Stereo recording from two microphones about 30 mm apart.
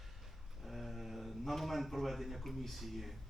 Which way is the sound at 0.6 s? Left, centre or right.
Centre.